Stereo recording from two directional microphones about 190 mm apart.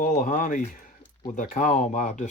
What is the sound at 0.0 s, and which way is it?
Speech, 45° left (ahead or behind).